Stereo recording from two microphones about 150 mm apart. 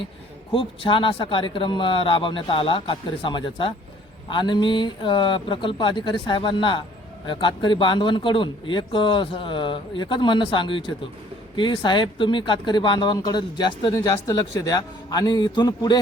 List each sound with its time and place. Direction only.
0.5 s a man's voice: 35° left (ahead or behind)